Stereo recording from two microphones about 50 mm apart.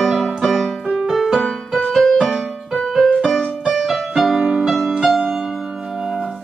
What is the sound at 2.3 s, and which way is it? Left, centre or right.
Music, centre.